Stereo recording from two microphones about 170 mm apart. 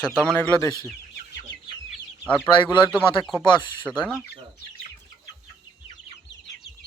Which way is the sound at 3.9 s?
Centre (ahead or behind).